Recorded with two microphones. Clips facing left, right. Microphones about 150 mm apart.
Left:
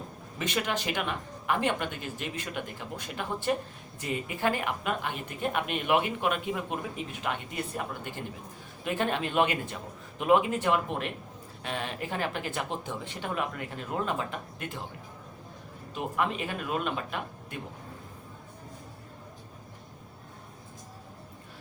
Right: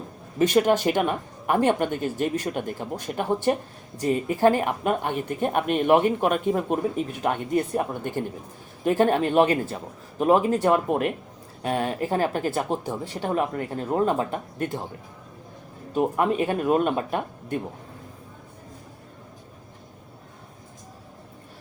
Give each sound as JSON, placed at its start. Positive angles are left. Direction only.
{"t": 0.3, "sound": "a woman's voice", "side_deg": -40}
{"t": 16.0, "sound": "a woman's voice", "side_deg": -40}